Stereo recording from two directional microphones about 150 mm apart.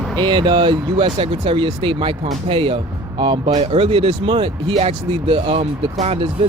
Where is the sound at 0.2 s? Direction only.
30° right (ahead or behind).